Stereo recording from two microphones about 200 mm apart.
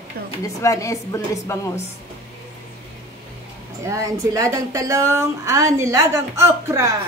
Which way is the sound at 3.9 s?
15° right (ahead or behind).